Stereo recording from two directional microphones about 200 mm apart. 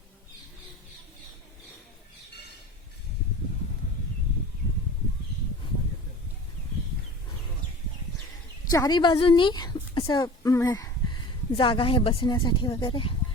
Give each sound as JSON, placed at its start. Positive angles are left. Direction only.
{"t": 8.7, "sound": "a woman's voice", "side_deg": 20}